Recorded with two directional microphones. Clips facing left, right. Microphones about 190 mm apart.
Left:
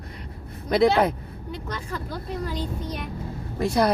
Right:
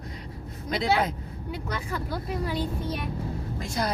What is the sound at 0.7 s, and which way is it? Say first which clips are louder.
Speech: left 7 dB; 60° left (ahead or behind).